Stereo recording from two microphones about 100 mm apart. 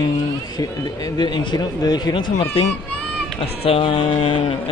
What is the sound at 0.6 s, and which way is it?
Speech, 40° left (ahead or behind).